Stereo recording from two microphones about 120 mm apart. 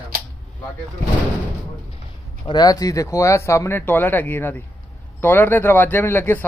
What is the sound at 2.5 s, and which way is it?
Speech, 35° left (ahead or behind).